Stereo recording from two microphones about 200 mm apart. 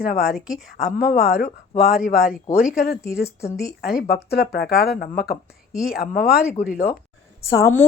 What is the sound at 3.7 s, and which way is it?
Speech, 50° left (ahead or behind).